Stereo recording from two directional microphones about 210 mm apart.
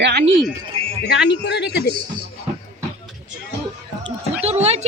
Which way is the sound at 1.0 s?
55° left (ahead or behind).